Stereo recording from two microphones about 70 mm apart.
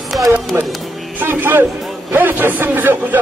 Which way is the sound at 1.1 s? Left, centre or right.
Right.